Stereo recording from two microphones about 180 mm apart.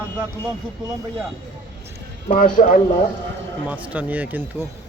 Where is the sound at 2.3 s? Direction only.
45° left (ahead or behind).